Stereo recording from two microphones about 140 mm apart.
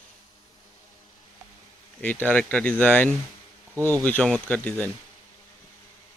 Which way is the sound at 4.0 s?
10° left (ahead or behind).